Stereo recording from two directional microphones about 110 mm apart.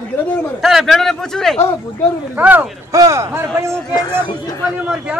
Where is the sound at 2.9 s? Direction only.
30° right (ahead or behind).